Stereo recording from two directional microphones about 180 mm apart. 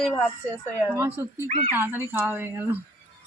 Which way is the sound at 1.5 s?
35° right (ahead or behind).